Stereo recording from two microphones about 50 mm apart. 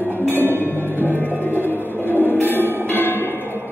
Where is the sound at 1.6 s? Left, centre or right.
Right.